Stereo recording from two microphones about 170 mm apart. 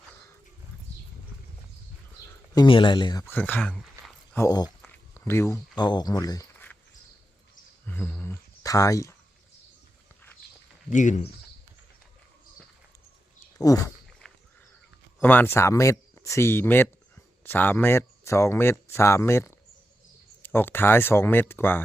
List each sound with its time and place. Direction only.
2.6 s speech: 30° left (ahead or behind)
3.2 s speech: 10° left (ahead or behind)
4.4 s speech: 20° left (ahead or behind)
6.5 s a sound: 10° left (ahead or behind)
7.9 s a sound: 10° left (ahead or behind)
10.8 s speech: 45° left (ahead or behind)
13.6 s speech: 20° left (ahead or behind)
15.2 s speech: 10° left (ahead or behind)